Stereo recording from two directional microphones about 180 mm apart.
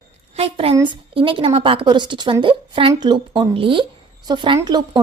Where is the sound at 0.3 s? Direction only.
30° right (ahead or behind).